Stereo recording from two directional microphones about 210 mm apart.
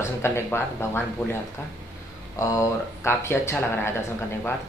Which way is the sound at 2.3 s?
15° left (ahead or behind).